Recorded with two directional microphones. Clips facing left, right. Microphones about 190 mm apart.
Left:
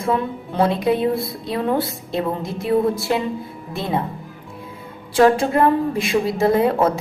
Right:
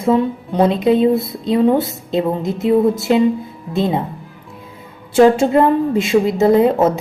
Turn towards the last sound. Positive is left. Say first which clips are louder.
# right 4 dB
turn(degrees=-20)  # may be behind; listen again after turning